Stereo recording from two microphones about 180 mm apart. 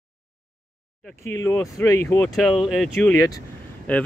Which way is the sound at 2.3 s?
Centre (ahead or behind).